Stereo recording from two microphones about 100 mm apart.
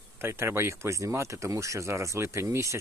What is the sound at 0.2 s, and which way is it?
Speech, 25° right (ahead or behind).